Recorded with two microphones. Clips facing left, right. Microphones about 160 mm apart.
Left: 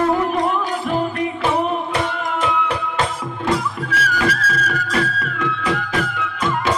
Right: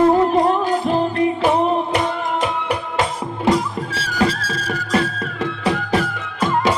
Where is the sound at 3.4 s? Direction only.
25° right (ahead or behind).